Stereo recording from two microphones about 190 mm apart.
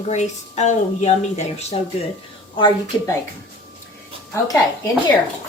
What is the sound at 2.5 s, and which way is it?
Speech, 25° left (ahead or behind).